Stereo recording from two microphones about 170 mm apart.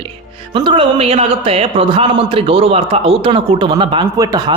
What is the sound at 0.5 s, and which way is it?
Speech, 30° right (ahead or behind).